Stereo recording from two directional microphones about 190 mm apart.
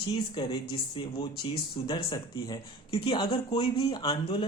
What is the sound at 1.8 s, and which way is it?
Speech, 25° left (ahead or behind).